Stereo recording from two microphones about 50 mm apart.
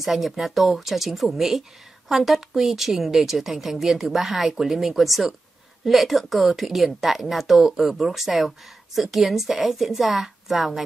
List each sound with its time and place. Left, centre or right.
0.0 s speech: centre